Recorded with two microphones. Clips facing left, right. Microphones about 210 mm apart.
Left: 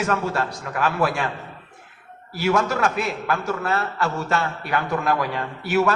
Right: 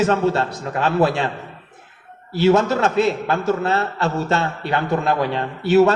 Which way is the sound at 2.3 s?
25° right (ahead or behind).